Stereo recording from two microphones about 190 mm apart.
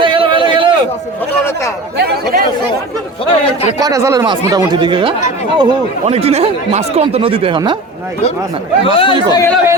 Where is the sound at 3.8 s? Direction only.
15° right (ahead or behind).